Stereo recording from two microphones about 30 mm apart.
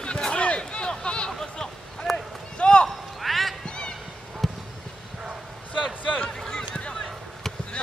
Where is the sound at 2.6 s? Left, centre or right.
Left.